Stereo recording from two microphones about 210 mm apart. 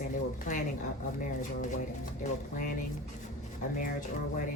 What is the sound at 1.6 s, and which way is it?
A woman's voice, 35° left (ahead or behind).